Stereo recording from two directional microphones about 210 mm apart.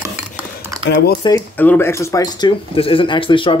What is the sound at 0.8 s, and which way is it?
Speech, 50° left (ahead or behind).